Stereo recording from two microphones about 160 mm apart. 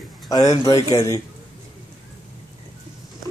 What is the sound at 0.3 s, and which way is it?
Speech, 25° left (ahead or behind).